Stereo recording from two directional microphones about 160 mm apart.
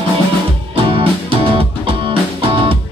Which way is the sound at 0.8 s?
35° right (ahead or behind).